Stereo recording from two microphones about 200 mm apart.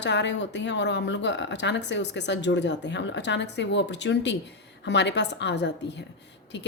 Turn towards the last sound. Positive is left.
turn(degrees=60)  # may be behind; listen again after turning